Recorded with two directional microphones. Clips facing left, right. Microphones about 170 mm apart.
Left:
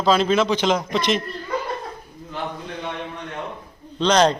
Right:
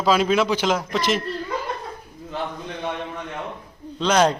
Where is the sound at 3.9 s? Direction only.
5° right (ahead or behind).